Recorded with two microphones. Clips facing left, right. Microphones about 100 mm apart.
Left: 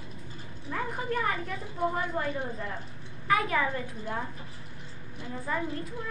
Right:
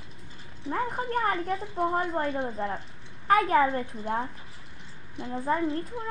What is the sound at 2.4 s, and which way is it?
Speech, 30° right (ahead or behind).